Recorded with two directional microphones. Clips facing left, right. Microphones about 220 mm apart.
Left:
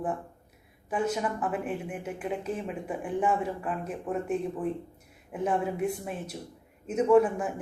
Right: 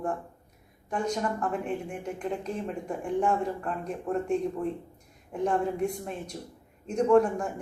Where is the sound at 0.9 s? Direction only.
5° left (ahead or behind).